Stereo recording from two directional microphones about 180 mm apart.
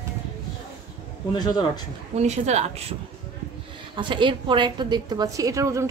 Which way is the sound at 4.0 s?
25° right (ahead or behind).